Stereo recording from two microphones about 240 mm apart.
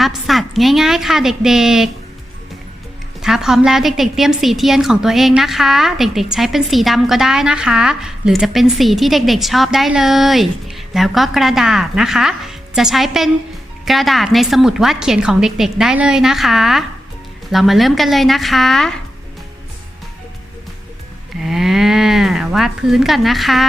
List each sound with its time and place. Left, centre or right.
0.0 s a woman's voice: centre
3.2 s a woman's voice: centre
21.5 s a woman's voice: centre